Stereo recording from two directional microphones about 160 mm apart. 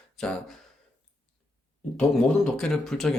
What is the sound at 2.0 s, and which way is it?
Speech, 5° left (ahead or behind).